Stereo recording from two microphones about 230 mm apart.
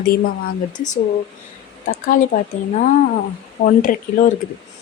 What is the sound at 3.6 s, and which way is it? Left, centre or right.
Speech, left.